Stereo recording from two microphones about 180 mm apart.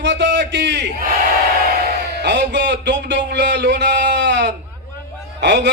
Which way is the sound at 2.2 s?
75° right (ahead or behind).